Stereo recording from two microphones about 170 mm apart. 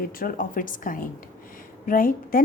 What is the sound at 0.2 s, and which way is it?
A woman's voice, 55° left (ahead or behind).